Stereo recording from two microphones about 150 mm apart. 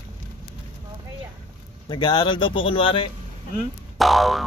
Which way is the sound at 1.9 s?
30° left (ahead or behind).